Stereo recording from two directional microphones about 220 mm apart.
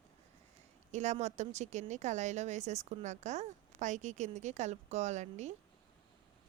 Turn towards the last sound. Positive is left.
turn(degrees=-30)  # may be behind; listen again after turning